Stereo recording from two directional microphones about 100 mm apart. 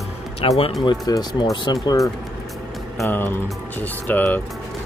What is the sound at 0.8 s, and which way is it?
Speech, 45° left (ahead or behind).